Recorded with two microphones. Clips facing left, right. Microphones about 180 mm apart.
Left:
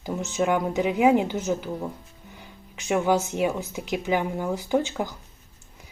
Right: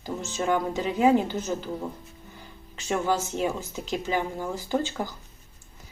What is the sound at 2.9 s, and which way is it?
Speech, 15° left (ahead or behind).